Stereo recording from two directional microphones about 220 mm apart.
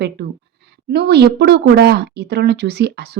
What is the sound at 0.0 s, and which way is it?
A woman's voice, 50° right (ahead or behind).